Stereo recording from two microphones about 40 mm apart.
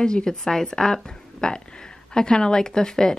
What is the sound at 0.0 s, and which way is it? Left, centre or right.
A woman's voice, centre.